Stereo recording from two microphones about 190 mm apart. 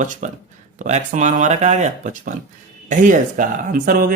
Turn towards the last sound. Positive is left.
turn(degrees=-45)  # may be behind; listen again after turning